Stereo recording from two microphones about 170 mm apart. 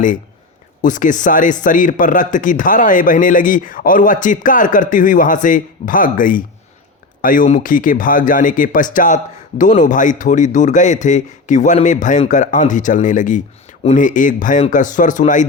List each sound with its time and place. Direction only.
0.8 s speech: 50° left (ahead or behind)